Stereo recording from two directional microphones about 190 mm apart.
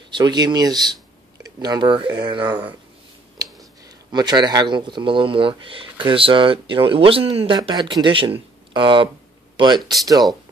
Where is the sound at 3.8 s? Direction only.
20° right (ahead or behind).